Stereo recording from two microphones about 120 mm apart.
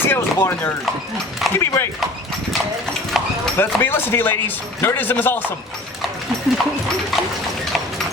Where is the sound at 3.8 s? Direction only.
20° left (ahead or behind).